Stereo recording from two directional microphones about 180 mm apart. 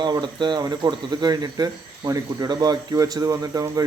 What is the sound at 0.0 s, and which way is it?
Speech, 25° right (ahead or behind).